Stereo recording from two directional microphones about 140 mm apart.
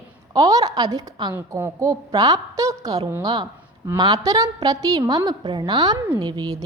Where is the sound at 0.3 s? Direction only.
25° right (ahead or behind).